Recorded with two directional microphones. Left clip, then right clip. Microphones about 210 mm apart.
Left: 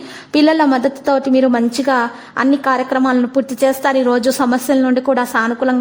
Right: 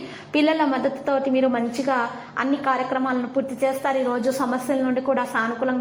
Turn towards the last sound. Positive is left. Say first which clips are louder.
# left 7 dB
turn(degrees=40)  # may be behind; listen again after turning